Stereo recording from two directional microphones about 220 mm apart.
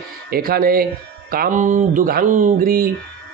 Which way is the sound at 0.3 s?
45° right (ahead or behind).